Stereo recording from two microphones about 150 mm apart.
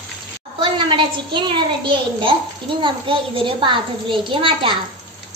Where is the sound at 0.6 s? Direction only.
30° right (ahead or behind).